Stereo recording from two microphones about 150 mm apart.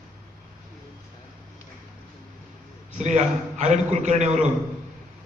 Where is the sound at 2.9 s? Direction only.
50° right (ahead or behind).